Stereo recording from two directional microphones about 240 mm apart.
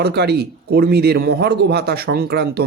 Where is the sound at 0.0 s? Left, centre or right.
Right.